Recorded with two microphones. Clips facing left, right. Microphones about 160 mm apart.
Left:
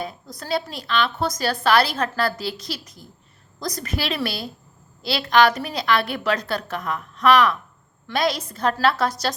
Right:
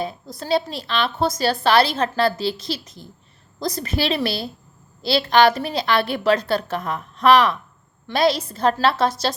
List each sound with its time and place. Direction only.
0.0 s a woman's voice: 25° right (ahead or behind)